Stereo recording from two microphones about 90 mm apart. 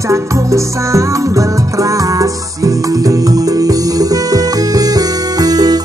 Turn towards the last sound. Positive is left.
turn(degrees=-45)  # may be behind; listen again after turning